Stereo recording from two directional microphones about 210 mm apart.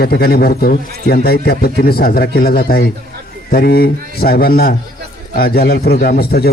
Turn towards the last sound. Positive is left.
turn(degrees=50)  # may be behind; listen again after turning